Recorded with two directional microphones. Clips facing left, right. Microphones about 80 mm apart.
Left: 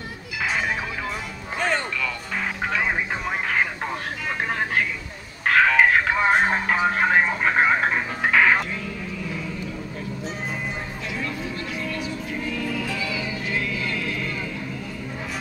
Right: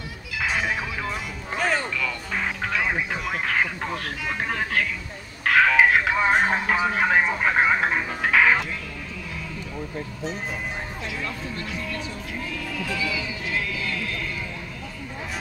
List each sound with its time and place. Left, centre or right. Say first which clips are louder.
1.6 s music: even; centre
4.5 s vehicle: left 1 dB; left
5.5 s telephone: even; centre
6.2 s a sound: left 1 dB; centre
7.4 s radio: left 1 dB; centre
8.3 s music: left 1 dB; centre